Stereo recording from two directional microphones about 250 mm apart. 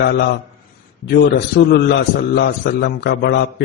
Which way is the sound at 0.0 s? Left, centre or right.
Left.